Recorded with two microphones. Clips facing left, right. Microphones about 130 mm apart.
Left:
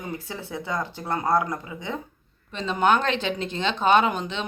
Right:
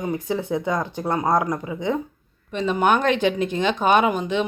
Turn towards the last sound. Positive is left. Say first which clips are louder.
# right 3 dB
turn(degrees=-10)  # may be behind; listen again after turning